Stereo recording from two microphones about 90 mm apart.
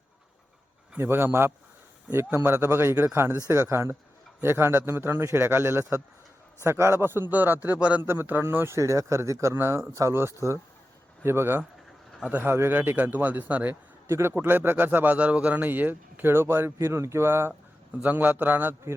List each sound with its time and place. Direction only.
0.9 s a man's voice: 25° right (ahead or behind)
3.3 s a man's voice: 35° right (ahead or behind); by 8.0 s 15° right (ahead or behind)
8.0 s a man's voice: 25° right (ahead or behind)
14.1 s a man's voice: 30° right (ahead or behind)
18.0 s a man's voice: 20° right (ahead or behind)